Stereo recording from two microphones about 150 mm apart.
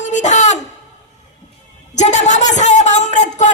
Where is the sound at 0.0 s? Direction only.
55° left (ahead or behind).